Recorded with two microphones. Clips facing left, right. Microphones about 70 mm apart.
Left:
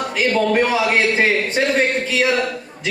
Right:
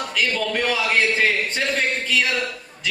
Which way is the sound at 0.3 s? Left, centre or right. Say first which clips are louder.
Left 10 dB; left.